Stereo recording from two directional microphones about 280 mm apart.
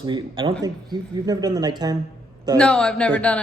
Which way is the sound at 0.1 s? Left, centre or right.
Centre.